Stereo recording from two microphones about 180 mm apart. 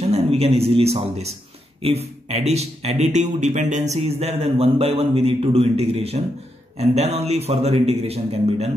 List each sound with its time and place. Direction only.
0.0 s a man's voice: 35° right (ahead or behind)